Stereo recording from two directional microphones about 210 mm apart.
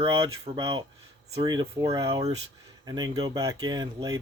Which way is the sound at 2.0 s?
30° right (ahead or behind).